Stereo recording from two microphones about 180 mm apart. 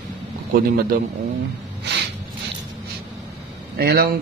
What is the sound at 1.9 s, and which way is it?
Snort, 70° right (ahead or behind).